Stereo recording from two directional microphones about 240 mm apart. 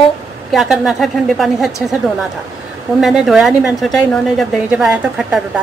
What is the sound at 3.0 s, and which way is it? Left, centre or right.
A woman's voice, centre.